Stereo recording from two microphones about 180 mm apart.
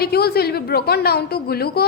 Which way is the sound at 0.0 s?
60° left (ahead or behind).